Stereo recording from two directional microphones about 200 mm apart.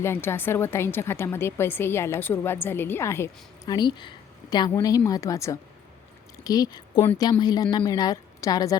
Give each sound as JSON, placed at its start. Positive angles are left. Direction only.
{"t": 0.0, "sound": "a woman's voice", "side_deg": 10}